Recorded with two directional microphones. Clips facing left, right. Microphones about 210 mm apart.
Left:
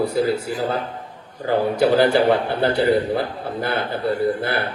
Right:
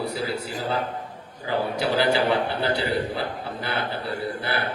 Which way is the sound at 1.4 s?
50° left (ahead or behind).